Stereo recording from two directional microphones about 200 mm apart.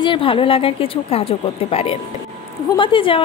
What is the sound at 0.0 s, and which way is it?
A woman's voice, 25° left (ahead or behind).